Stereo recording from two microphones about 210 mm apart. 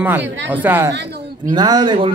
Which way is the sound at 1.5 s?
20° right (ahead or behind).